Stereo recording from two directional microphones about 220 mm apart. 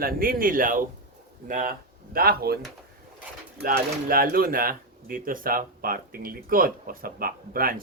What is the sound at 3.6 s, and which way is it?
Speech, 40° right (ahead or behind).